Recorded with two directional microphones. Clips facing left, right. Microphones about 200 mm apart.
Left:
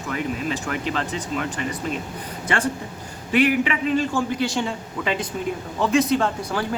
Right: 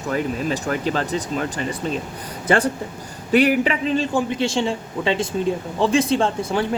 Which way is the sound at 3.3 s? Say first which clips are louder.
Right 3 dB; 35° right (ahead or behind).